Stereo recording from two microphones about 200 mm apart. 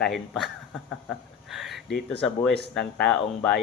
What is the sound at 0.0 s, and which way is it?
Speech, centre (ahead or behind).